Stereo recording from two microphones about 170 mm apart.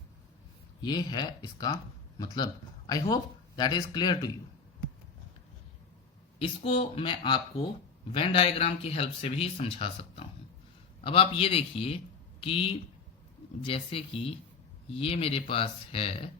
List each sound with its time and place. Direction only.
0.8 s speech: 25° left (ahead or behind)
6.4 s speech: 35° left (ahead or behind)